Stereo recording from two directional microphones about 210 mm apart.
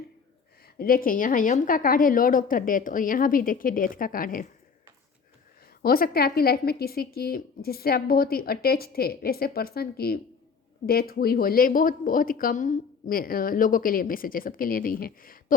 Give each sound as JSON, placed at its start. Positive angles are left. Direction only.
{"t": 0.8, "sound": "a woman's voice", "side_deg": 45}
{"t": 5.8, "sound": "speech", "side_deg": 45}